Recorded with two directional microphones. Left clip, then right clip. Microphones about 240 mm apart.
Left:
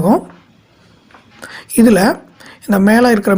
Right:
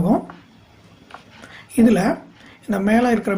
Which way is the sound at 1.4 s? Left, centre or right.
Left.